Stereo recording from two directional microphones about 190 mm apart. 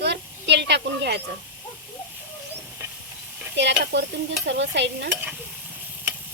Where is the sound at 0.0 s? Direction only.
65° right (ahead or behind).